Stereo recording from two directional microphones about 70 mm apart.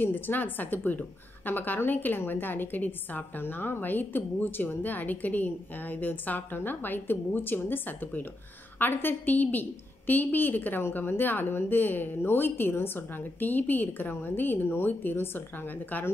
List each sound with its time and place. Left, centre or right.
0.0 s a woman's voice: left